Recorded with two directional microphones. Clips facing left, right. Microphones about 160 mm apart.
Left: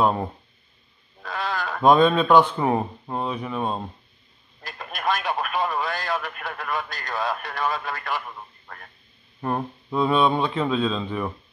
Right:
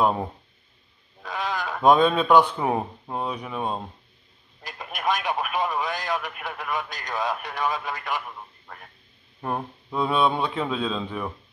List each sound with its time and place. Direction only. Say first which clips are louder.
0.0 s speech: left 1 dB; 5° right (ahead or behind)
1.2 s speech: left 1 dB; 15° right (ahead or behind)
4.6 s radio: even; 15° right (ahead or behind)
9.4 s a man's voice: left 3 dB; centre (ahead or behind)